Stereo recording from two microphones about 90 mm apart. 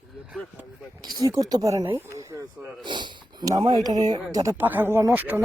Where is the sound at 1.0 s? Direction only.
45° right (ahead or behind).